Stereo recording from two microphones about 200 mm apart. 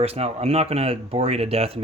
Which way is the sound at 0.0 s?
30° right (ahead or behind).